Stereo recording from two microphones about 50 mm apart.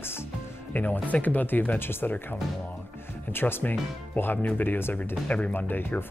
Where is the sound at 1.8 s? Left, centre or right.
Left.